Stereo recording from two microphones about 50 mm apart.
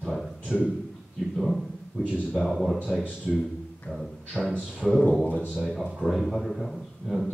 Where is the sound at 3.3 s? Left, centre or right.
Centre.